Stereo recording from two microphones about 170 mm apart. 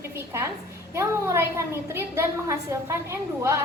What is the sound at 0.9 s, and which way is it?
A woman's voice, 15° right (ahead or behind).